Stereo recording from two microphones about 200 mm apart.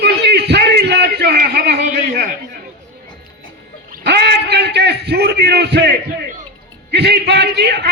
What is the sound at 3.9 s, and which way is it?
A man's voice, 55° right (ahead or behind).